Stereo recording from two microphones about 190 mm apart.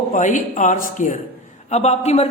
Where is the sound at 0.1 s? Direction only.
40° left (ahead or behind).